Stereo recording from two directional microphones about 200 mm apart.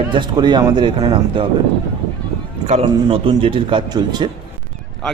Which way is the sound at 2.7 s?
30° right (ahead or behind).